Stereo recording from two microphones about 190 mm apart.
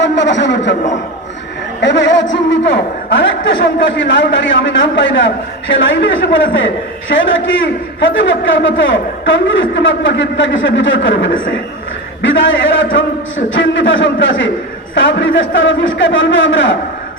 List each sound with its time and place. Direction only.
0.0 s a man's voice: 70° left (ahead or behind)
1.8 s a man's voice: 70° left (ahead or behind)